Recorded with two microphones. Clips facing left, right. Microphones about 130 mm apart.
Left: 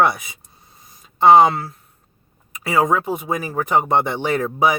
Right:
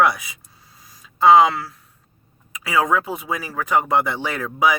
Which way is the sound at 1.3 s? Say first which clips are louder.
Left 2 dB; 25° left (ahead or behind).